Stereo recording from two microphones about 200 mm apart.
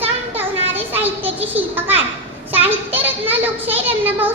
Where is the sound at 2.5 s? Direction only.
10° right (ahead or behind).